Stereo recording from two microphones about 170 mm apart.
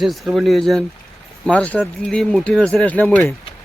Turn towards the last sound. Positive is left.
turn(degrees=10)  # may be behind; listen again after turning